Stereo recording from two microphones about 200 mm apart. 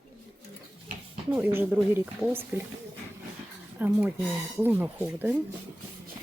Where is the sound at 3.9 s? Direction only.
10° right (ahead or behind).